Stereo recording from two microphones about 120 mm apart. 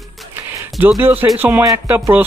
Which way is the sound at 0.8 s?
15° right (ahead or behind).